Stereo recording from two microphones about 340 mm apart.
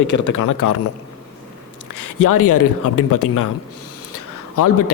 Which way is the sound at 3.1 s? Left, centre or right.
Left.